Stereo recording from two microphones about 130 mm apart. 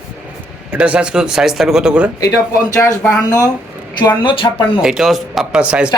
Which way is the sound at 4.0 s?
35° left (ahead or behind).